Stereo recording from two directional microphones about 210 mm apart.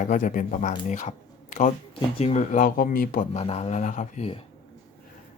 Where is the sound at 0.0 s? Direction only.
40° left (ahead or behind).